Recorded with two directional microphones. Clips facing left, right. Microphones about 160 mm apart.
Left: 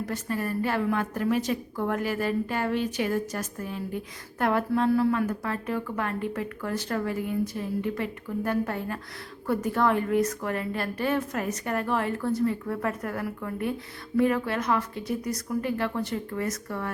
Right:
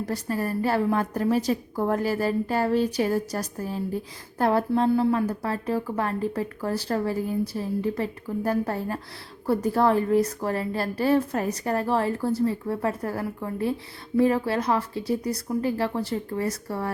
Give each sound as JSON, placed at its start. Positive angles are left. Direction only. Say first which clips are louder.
{"t": 0.1, "sound": "a woman's voice", "louder": "right 4 dB", "side_deg": -35}